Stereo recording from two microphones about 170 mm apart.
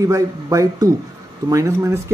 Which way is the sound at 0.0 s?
20° right (ahead or behind).